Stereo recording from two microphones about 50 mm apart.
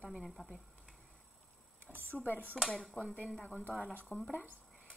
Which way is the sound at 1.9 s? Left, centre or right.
Right.